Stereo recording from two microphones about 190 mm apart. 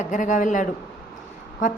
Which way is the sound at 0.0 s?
40° left (ahead or behind).